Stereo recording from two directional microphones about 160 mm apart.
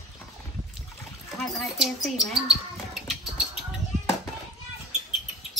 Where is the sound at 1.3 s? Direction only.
Centre (ahead or behind).